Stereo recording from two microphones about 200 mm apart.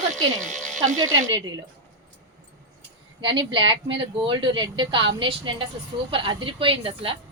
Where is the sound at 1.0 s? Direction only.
15° right (ahead or behind).